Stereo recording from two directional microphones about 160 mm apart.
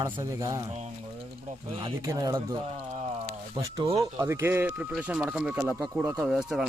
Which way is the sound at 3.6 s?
25° right (ahead or behind).